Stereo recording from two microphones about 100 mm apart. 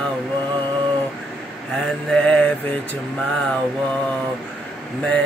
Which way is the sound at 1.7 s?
10° left (ahead or behind).